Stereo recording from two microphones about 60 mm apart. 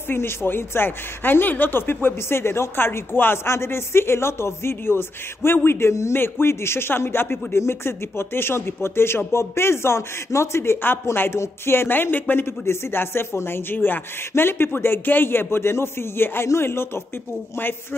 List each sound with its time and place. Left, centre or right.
0.1 s speech: left